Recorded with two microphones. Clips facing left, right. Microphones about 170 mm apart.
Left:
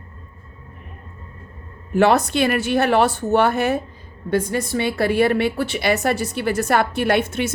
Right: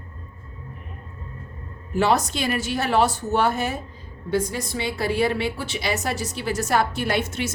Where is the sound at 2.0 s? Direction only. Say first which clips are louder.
Left 5 dB; 60° left (ahead or behind).